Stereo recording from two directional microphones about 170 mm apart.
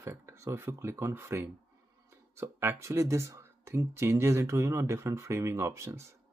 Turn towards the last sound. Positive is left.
turn(degrees=-15)  # may be behind; listen again after turning